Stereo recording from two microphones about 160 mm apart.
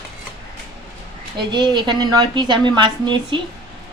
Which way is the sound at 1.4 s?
30° right (ahead or behind).